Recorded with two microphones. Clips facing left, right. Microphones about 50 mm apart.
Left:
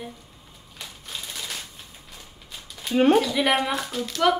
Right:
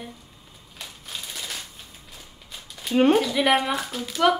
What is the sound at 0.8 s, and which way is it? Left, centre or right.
Typewriter, centre.